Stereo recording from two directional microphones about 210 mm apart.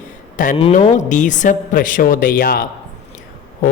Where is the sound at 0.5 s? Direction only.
30° left (ahead or behind).